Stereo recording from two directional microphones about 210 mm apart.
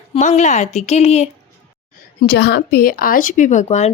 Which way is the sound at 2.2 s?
50° left (ahead or behind).